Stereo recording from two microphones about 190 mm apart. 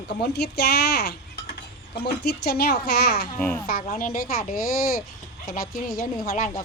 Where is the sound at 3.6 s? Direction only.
50° left (ahead or behind).